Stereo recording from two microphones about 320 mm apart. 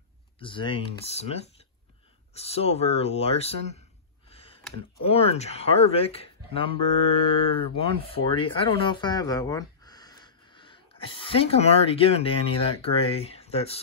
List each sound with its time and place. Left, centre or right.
0.4 s speech: centre
4.3 s a sound: centre
5.0 s speech: centre